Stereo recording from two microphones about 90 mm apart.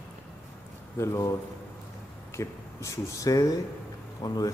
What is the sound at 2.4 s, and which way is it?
A man's voice, 35° left (ahead or behind).